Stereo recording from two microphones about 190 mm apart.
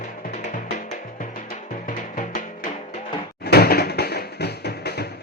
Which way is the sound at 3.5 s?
55° left (ahead or behind).